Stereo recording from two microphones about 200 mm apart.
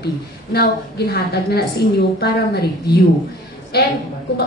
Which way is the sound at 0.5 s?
50° left (ahead or behind).